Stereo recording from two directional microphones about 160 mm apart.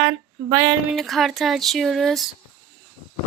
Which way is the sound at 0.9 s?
Centre (ahead or behind).